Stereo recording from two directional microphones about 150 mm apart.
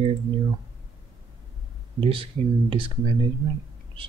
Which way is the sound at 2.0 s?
35° right (ahead or behind).